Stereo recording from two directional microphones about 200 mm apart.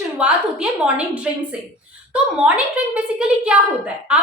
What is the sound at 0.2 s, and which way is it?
A woman's voice, 5° right (ahead or behind).